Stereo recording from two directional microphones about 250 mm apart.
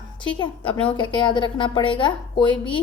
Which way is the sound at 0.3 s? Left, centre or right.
Centre.